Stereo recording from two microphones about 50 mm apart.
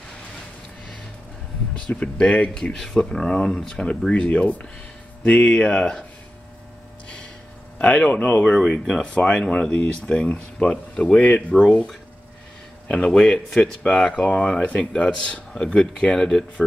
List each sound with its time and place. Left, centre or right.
1.9 s a man's voice: left
7.8 s a man's voice: left
8.5 s speech: centre
8.8 s a man's voice: centre
12.8 s a man's voice: left